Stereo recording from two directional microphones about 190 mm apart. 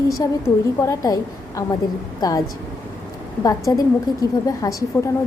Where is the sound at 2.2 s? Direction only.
20° left (ahead or behind).